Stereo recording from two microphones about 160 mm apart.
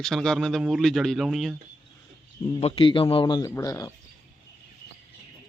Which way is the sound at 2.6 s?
35° left (ahead or behind).